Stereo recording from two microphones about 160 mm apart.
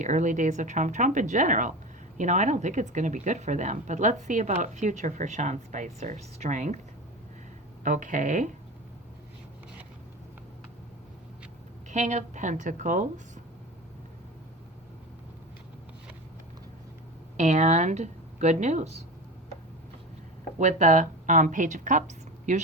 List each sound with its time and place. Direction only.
0.0 s speech: 50° right (ahead or behind)
7.9 s speech: 55° right (ahead or behind)
11.9 s speech: 45° right (ahead or behind)
17.3 s speech: 45° right (ahead or behind)
20.6 s speech: 50° right (ahead or behind)